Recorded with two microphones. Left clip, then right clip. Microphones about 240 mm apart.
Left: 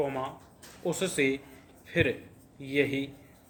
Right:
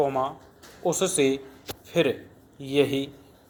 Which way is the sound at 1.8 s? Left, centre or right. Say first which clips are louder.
Right 4 dB; centre.